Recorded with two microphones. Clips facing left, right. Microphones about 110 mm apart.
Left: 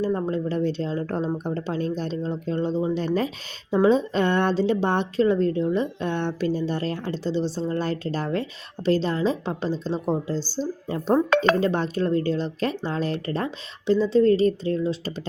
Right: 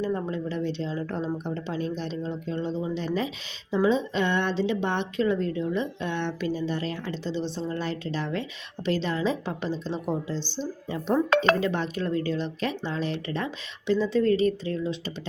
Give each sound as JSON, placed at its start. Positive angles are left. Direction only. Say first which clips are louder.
{"t": 0.0, "sound": "a woman's voice", "louder": "left 4 dB", "side_deg": 35}